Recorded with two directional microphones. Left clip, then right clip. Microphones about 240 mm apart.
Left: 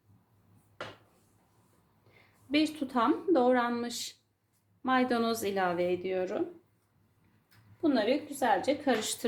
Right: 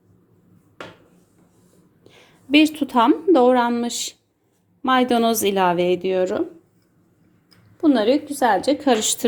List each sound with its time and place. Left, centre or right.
2.5 s a woman's voice: right
7.8 s a woman's voice: right